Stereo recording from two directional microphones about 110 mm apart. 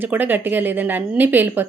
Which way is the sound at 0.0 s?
15° right (ahead or behind).